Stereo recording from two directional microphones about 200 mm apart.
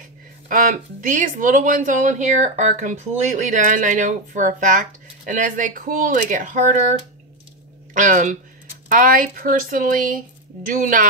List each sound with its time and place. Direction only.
0.5 s speech: 40° right (ahead or behind)
7.9 s speech: 40° right (ahead or behind)